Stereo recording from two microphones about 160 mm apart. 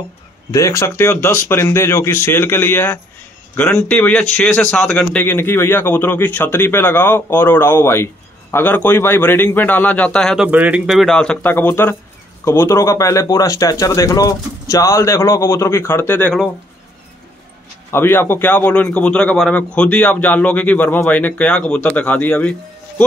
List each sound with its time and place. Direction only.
0.5 s a man's voice: 20° left (ahead or behind)
17.9 s a man's voice: 15° left (ahead or behind)